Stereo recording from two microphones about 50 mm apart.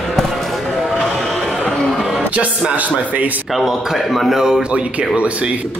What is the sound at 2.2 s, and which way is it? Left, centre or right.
Music, right.